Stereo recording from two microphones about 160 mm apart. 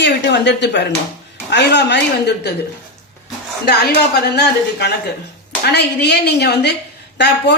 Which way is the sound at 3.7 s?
80° left.